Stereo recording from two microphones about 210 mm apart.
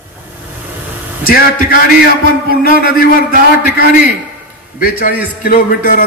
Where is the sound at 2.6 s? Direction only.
45° left (ahead or behind).